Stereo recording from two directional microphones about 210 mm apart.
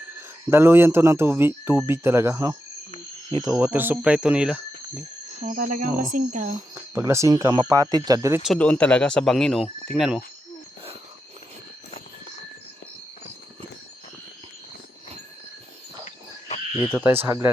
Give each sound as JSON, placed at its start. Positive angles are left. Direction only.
{"t": 0.5, "sound": "speech", "side_deg": -10}
{"t": 5.5, "sound": "speech", "side_deg": -40}
{"t": 6.7, "sound": "speech", "side_deg": -15}
{"t": 8.4, "sound": "speech", "side_deg": 5}
{"t": 16.9, "sound": "speech", "side_deg": -10}